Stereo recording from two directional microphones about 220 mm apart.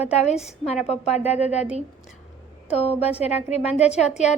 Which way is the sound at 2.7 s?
30° left (ahead or behind).